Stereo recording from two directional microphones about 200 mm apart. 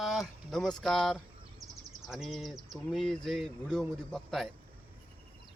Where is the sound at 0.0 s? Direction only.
Centre (ahead or behind).